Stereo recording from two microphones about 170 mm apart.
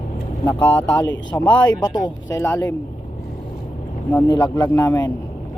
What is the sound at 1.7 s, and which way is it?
Speech, 25° left (ahead or behind).